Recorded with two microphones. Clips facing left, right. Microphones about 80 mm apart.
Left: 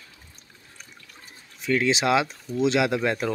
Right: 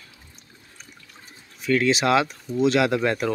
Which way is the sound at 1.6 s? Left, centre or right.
Centre.